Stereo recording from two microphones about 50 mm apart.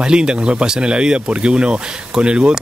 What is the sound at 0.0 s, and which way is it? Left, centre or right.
Speech, centre.